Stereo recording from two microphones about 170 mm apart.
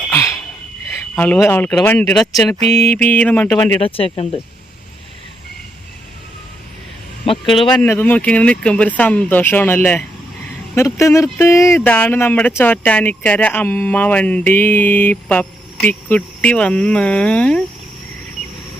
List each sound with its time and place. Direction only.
0.1 s a sound: 15° left (ahead or behind)
1.1 s speech: 10° left (ahead or behind)
2.6 s mantra: 40° right (ahead or behind)
2.9 s speech: 10° left (ahead or behind)
3.8 s speech: 35° left (ahead or behind)
7.7 s speech: 10° left (ahead or behind)